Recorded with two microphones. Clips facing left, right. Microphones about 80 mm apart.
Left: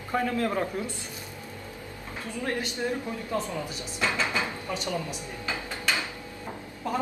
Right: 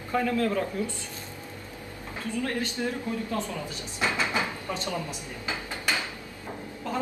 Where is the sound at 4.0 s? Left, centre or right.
Right.